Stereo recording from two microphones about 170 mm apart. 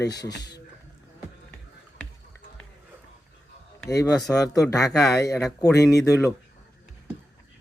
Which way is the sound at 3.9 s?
20° left (ahead or behind).